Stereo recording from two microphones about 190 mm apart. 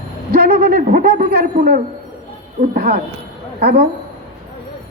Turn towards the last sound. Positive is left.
turn(degrees=-55)  # may be behind; listen again after turning